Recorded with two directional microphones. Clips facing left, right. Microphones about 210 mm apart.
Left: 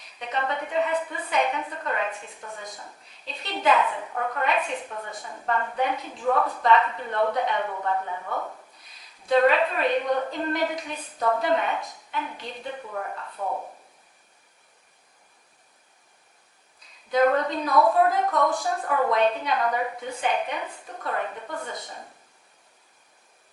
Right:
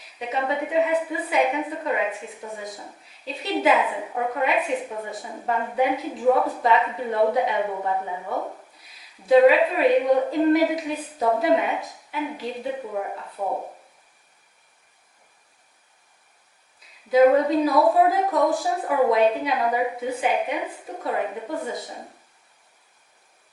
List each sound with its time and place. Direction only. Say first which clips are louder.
0.0 s a woman's voice: right 3 dB; 5° right (ahead or behind); by 8.5 s 20° right (ahead or behind)
8.8 s a woman's voice: right 3 dB; 5° right (ahead or behind); by 13.7 s 20° right (ahead or behind)
17.1 s a woman's voice: right 5 dB; 5° right (ahead or behind)